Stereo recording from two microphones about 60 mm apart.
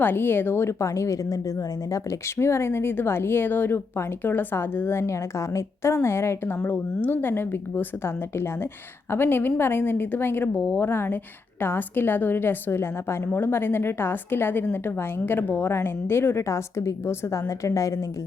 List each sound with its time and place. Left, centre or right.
0.0 s a woman's voice: left
2.4 s a woman's voice: left